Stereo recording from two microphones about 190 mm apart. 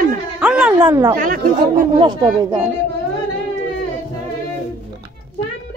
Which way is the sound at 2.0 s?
25° right (ahead or behind).